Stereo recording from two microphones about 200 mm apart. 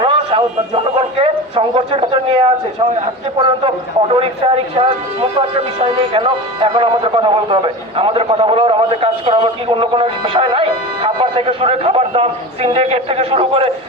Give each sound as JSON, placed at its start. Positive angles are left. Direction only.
{"t": 0.0, "sound": "a sound", "side_deg": -25}
{"t": 0.9, "sound": "a man's voice", "side_deg": -25}
{"t": 4.1, "sound": "a man's voice", "side_deg": -30}